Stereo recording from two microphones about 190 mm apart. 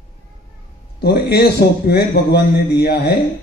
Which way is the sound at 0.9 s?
60° left (ahead or behind).